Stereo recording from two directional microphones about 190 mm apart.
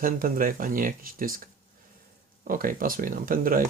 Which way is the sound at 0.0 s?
45° right (ahead or behind).